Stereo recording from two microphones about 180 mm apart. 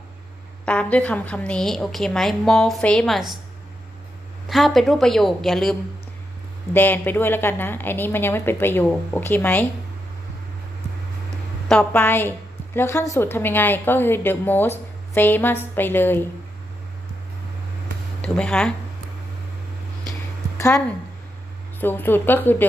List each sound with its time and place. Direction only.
0.6 s a woman's voice: 5° left (ahead or behind)
4.4 s a woman's voice: centre (ahead or behind)
6.7 s a woman's voice: 10° left (ahead or behind)
11.7 s a woman's voice: 10° left (ahead or behind)
18.2 s speech: 5° left (ahead or behind)
20.6 s a woman's voice: 15° left (ahead or behind)